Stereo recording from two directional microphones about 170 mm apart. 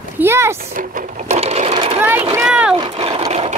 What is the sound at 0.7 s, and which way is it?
Sewing machine, 50° right (ahead or behind).